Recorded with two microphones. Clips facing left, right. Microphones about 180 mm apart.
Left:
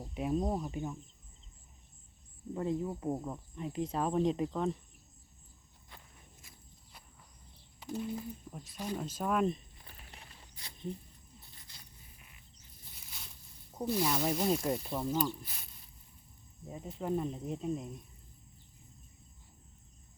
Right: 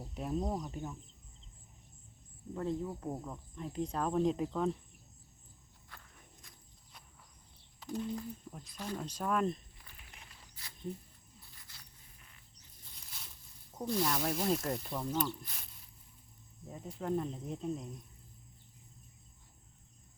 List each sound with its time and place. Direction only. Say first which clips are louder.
0.1 s speech: left 3 dB; 5° left (ahead or behind)
2.6 s speech: left 2 dB; 10° left (ahead or behind)
3.3 s speech: left 2 dB; 5° left (ahead or behind)
6.4 s walk: left 1 dB; 5° left (ahead or behind)
7.9 s speech: even; 5° left (ahead or behind)
10.0 s a sound: left 4 dB; 35° left (ahead or behind)
11.3 s zipper: left 1 dB; 20° left (ahead or behind)
12.8 s a sound: left 1 dB; 5° left (ahead or behind)
13.7 s speech: left 2 dB; 5° left (ahead or behind)